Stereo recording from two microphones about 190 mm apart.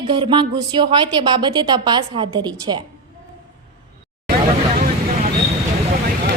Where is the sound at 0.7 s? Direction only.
25° right (ahead or behind).